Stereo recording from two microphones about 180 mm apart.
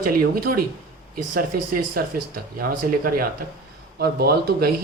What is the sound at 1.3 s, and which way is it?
Speech, 50° right (ahead or behind).